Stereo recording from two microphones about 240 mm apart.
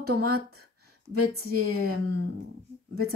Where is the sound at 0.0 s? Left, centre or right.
Right.